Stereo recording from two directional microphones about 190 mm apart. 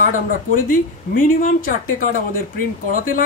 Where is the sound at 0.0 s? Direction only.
45° left (ahead or behind).